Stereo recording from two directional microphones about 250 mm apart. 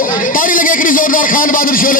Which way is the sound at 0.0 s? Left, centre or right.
Left.